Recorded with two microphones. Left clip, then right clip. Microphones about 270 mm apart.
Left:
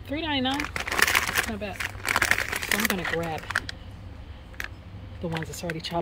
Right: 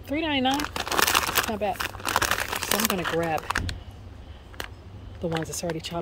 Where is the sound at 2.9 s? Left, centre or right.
Right.